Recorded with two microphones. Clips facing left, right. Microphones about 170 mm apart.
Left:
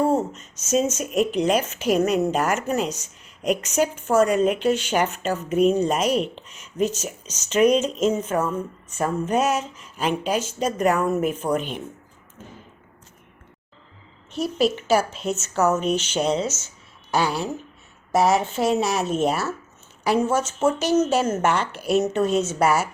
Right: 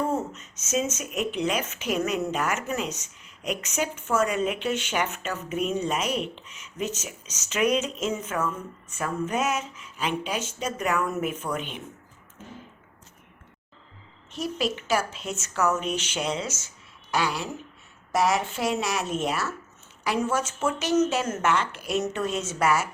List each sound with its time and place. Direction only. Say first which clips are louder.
0.0 s speech: left 6 dB; 35° left (ahead or behind)
14.3 s a woman's voice: left 6 dB; 35° left (ahead or behind)